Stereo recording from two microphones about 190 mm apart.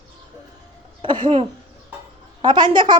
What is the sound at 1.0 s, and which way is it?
Speech, 25° right (ahead or behind).